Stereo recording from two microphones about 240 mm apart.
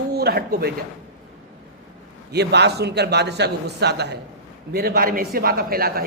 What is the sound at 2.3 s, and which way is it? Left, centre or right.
A woman's voice, right.